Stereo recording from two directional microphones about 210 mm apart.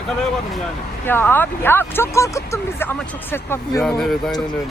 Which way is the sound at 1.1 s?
10° left (ahead or behind).